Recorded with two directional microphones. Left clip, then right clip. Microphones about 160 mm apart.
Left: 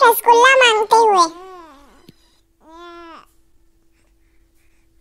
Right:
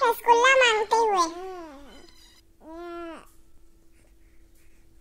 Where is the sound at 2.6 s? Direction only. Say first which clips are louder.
Even; 20° left (ahead or behind).